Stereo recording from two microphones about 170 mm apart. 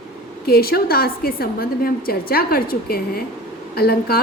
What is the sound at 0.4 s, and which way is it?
A woman's voice, 65° left (ahead or behind).